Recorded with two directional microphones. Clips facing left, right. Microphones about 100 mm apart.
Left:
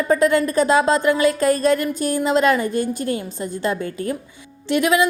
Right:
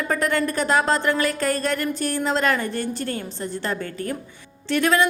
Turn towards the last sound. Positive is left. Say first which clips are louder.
# left 2 dB
turn(degrees=15)  # may be behind; listen again after turning